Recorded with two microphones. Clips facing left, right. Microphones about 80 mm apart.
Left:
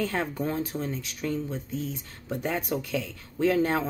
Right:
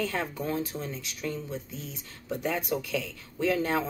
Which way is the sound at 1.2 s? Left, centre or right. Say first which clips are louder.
Left 3 dB; left.